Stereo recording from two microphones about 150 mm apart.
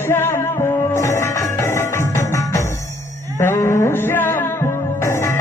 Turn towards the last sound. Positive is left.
turn(degrees=20)  # may be behind; listen again after turning